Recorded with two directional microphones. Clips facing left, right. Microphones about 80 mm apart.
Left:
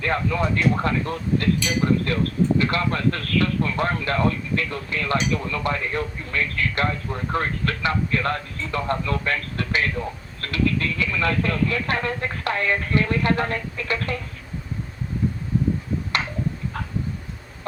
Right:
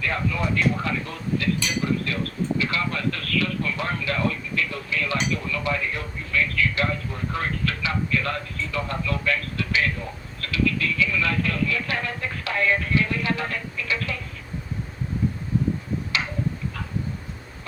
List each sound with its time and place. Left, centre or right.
0.0 s speech: left